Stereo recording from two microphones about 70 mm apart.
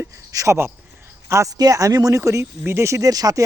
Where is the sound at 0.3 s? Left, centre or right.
Right.